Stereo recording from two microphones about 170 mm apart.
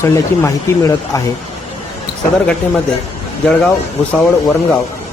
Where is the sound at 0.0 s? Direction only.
15° left (ahead or behind).